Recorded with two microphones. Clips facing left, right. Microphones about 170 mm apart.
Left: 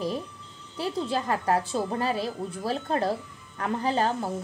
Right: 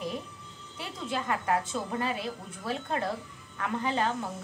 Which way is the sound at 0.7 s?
35° left (ahead or behind).